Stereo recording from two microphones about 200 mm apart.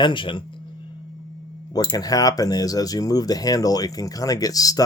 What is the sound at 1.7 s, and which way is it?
Speech, 20° left (ahead or behind).